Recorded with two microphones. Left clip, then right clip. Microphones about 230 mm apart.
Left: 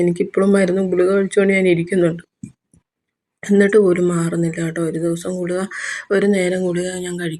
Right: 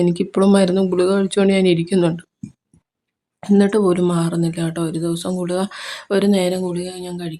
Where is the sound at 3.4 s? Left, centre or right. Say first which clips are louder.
Left 3 dB; centre.